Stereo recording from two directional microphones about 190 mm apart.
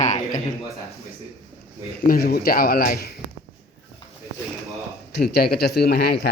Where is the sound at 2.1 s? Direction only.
55° left (ahead or behind).